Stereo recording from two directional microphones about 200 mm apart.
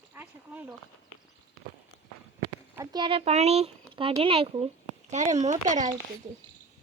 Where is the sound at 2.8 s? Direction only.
20° right (ahead or behind); by 5.9 s 35° right (ahead or behind).